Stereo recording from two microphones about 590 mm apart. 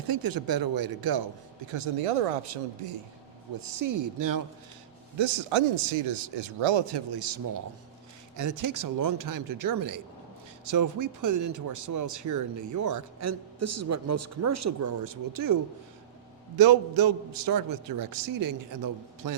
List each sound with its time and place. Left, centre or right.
0.1 s a man's voice: right
1.7 s speech: right
3.8 s a man's voice: right
5.1 s a man's voice: right
16.6 s a man's voice: right